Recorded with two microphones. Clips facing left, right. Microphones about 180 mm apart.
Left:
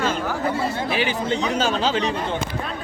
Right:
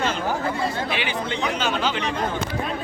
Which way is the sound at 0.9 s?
40° left (ahead or behind).